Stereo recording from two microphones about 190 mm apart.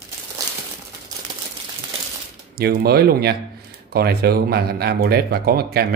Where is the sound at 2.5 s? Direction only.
55° right (ahead or behind).